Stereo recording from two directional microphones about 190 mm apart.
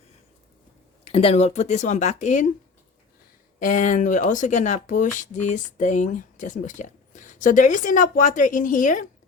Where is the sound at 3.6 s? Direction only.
40° left (ahead or behind).